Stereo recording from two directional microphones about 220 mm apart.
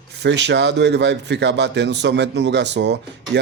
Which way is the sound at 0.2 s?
50° right (ahead or behind).